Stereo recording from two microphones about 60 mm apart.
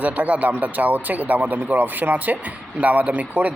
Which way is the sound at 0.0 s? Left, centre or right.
Right.